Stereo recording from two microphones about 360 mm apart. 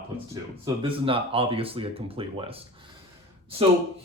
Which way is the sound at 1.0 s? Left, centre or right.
Centre.